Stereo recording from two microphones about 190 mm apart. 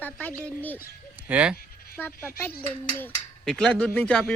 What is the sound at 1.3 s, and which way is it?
Speech, 5° right (ahead or behind).